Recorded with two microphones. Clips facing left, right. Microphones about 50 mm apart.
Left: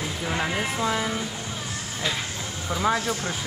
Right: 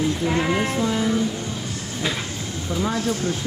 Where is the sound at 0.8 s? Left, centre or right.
Centre.